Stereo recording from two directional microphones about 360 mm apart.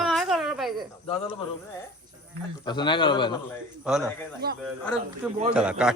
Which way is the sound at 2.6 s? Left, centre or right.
Centre.